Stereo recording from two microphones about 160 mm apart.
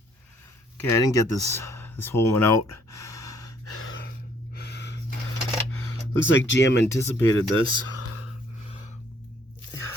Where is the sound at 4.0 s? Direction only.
75° left (ahead or behind); by 5.0 s 90° left.